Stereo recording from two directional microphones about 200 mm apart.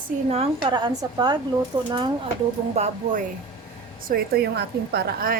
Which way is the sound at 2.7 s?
35° right (ahead or behind).